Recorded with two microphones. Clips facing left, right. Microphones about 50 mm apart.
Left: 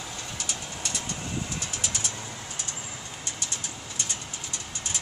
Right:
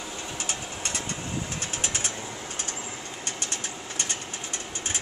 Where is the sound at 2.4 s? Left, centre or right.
Right.